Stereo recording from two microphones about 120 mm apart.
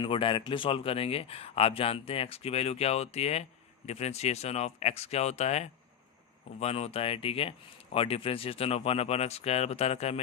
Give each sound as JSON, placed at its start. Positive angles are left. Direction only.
{"t": 0.0, "sound": "speech", "side_deg": 45}